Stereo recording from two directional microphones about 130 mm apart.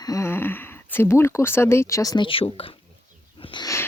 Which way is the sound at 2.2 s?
45° left (ahead or behind).